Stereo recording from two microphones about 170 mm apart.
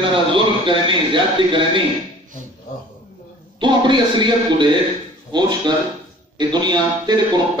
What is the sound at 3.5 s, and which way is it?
A man's voice, 30° right (ahead or behind).